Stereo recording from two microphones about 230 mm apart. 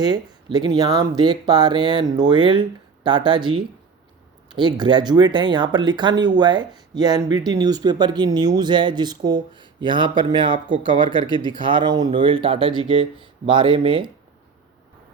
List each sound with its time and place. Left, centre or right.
0.0 s speech: centre